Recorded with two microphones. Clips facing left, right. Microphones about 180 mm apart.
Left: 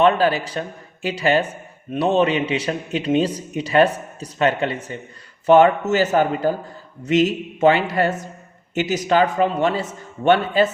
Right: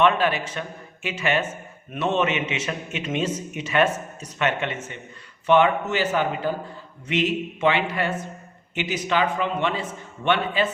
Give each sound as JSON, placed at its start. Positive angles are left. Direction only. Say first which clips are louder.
{"t": 0.0, "sound": "a man's voice", "louder": "left 4 dB", "side_deg": 35}